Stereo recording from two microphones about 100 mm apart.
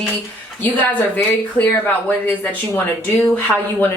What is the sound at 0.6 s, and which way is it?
A woman's voice, 15° left (ahead or behind).